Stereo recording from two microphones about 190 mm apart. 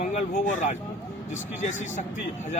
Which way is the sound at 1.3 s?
40° left (ahead or behind).